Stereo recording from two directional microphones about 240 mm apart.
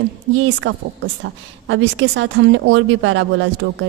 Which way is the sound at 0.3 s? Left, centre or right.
Right.